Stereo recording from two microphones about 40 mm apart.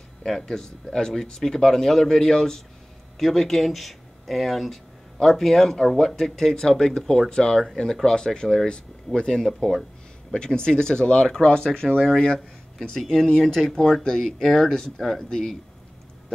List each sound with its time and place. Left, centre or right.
0.2 s speech: centre
9.5 s speech: centre
10.3 s speech: centre